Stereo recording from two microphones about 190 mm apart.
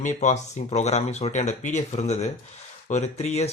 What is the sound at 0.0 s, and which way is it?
Speech, 40° left (ahead or behind).